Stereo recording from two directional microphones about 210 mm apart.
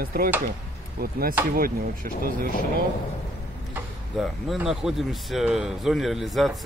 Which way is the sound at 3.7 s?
5° right (ahead or behind).